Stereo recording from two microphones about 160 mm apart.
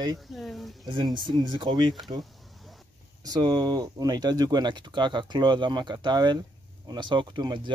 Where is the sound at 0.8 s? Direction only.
30° right (ahead or behind).